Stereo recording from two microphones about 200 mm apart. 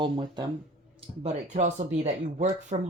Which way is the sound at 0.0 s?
25° right (ahead or behind).